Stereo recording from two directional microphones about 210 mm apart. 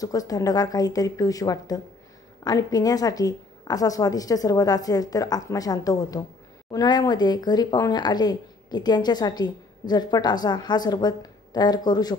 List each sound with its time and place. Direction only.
0.0 s a woman's voice: 15° left (ahead or behind)